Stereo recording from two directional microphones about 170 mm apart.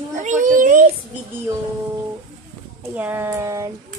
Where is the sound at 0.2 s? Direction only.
50° right (ahead or behind).